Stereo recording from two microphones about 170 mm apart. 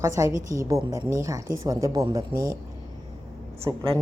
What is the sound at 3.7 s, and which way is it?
Speech, 25° right (ahead or behind).